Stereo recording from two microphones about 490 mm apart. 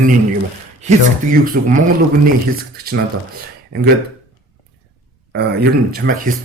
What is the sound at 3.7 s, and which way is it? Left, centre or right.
Speech, centre.